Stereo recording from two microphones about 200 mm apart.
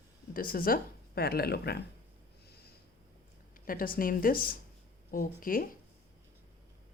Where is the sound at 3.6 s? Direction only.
45° left (ahead or behind).